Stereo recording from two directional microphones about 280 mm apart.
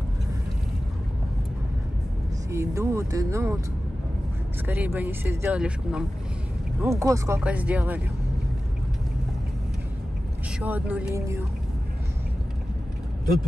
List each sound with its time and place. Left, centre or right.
2.5 s speech: centre
4.6 s speech: centre
10.6 s speech: centre